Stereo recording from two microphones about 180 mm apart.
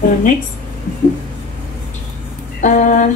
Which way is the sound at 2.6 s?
45° left (ahead or behind).